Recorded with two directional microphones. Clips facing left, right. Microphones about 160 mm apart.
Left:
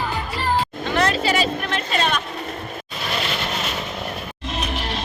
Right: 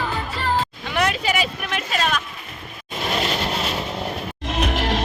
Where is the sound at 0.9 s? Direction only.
15° right (ahead or behind).